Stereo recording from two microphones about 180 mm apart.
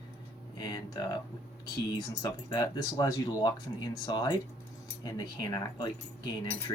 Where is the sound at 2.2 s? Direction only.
20° left (ahead or behind).